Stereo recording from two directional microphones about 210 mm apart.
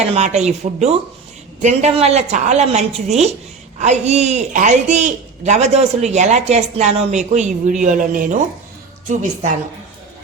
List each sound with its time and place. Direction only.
0.1 s speech: 30° right (ahead or behind)